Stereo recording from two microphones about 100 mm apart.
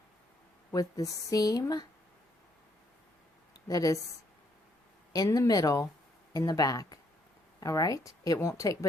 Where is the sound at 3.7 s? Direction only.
35° left (ahead or behind).